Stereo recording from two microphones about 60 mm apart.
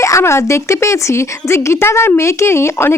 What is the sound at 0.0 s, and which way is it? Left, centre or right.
A woman's voice, left.